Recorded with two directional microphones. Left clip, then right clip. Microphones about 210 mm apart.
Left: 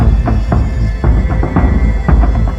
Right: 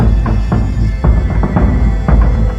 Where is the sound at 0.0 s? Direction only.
Centre (ahead or behind).